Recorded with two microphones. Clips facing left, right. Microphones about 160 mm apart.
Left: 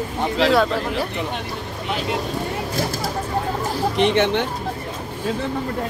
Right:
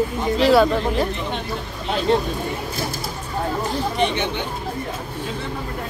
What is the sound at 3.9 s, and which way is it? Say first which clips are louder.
Speech: left 8 dB; 90° left.